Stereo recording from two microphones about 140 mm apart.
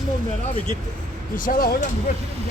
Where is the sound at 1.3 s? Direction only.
80° left.